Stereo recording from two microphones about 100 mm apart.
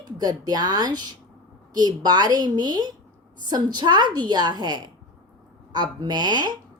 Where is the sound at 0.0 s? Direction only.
40° right (ahead or behind).